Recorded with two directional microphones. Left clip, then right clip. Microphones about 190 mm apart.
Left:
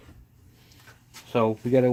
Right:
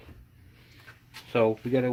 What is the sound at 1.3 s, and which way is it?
Speech, 25° left (ahead or behind).